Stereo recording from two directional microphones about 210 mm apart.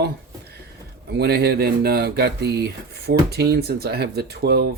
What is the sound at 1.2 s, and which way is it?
Speech, 50° right (ahead or behind).